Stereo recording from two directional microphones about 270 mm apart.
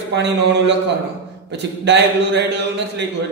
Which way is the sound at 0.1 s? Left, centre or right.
Right.